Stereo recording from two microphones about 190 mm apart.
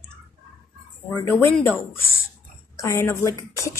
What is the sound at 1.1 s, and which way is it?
Speech, 10° left (ahead or behind).